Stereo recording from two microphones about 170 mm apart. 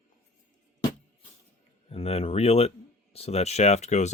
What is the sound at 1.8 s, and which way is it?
Speech, 35° left (ahead or behind).